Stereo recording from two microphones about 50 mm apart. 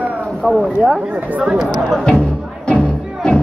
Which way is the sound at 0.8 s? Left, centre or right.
Right.